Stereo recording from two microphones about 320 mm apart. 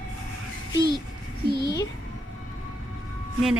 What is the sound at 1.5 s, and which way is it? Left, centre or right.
Speech, left.